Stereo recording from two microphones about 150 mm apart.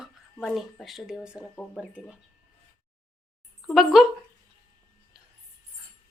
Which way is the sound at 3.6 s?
Centre (ahead or behind).